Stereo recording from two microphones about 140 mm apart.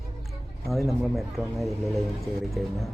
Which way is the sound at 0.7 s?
Centre (ahead or behind).